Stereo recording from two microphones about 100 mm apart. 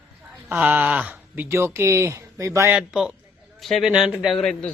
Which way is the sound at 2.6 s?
10° right (ahead or behind).